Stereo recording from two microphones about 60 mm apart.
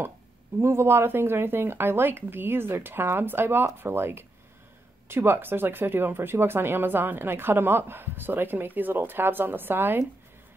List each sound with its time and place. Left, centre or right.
0.6 s speech: right